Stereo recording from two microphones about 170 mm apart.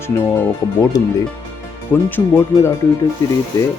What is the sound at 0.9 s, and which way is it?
Speech, 20° left (ahead or behind).